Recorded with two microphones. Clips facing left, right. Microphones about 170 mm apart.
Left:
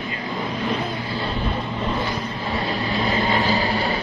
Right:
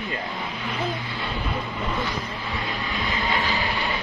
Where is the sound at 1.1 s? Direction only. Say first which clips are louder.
Left 5 dB; 30° left (ahead or behind).